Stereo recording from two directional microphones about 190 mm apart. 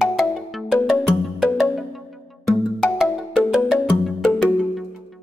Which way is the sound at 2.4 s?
Centre (ahead or behind).